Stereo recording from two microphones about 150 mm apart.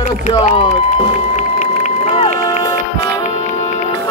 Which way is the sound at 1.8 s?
50° left (ahead or behind).